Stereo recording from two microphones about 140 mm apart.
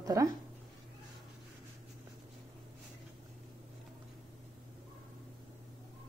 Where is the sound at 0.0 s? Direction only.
25° right (ahead or behind).